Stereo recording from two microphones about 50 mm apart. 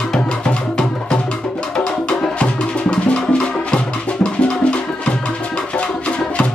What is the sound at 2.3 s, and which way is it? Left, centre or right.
Music, left.